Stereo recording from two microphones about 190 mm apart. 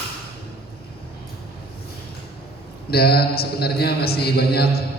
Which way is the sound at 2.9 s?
55° left (ahead or behind).